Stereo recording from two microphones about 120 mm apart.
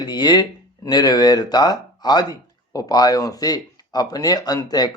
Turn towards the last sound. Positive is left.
turn(degrees=35)  # may be behind; listen again after turning